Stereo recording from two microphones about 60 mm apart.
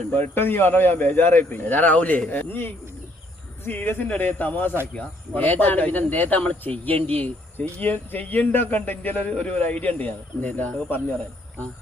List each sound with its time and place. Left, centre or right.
0.1 s speech: left